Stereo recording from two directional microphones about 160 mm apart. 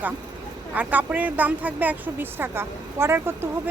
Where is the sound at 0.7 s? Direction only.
10° right (ahead or behind).